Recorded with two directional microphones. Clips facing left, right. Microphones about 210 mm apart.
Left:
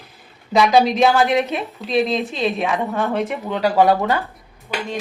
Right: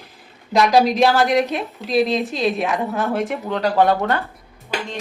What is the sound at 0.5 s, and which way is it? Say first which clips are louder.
A woman's voice: even; centre (ahead or behind).